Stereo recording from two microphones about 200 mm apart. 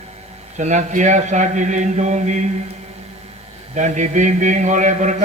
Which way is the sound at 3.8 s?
40° right (ahead or behind).